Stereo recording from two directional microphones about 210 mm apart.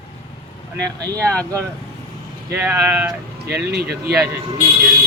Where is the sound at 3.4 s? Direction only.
50° right (ahead or behind).